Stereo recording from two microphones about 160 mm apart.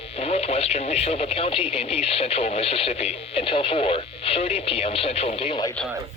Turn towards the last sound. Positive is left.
turn(degrees=35)  # may be behind; listen again after turning